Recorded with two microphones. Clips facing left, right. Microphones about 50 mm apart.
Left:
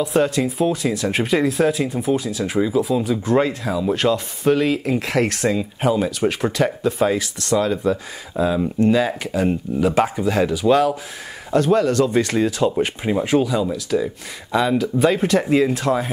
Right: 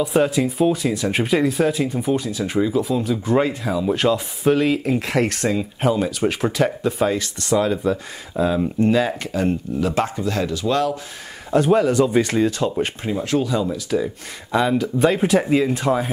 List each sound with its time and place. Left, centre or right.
0.0 s speech: centre
11.5 s speech: centre
13.2 s speech: centre
13.7 s speech: centre